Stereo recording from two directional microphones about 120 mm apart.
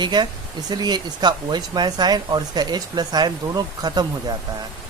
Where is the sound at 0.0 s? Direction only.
35° right (ahead or behind).